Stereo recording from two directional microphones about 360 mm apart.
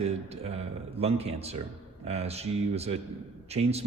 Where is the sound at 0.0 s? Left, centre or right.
Centre.